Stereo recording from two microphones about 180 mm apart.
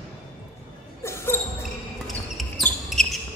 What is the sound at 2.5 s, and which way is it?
Basketball bounce, centre (ahead or behind).